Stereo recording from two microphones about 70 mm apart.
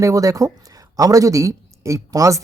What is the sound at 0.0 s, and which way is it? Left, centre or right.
Speech, right.